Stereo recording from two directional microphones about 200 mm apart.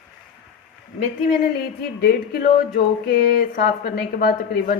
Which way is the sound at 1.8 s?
50° left (ahead or behind).